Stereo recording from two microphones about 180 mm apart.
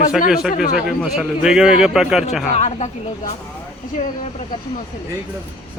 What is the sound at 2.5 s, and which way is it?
Speech, 40° left (ahead or behind).